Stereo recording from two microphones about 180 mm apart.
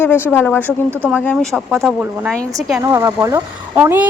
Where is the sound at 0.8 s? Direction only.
10° right (ahead or behind).